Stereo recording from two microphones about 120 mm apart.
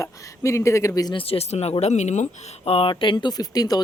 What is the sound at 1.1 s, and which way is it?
Speech, 55° left (ahead or behind).